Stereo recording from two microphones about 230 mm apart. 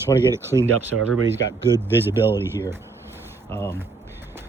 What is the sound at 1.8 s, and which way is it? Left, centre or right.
Speech, centre.